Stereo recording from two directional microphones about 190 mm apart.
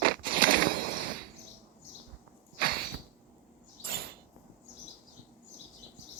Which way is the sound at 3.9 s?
55° right (ahead or behind).